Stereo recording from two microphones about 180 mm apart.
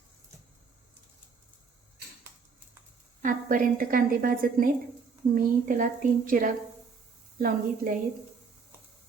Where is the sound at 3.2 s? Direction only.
50° right (ahead or behind).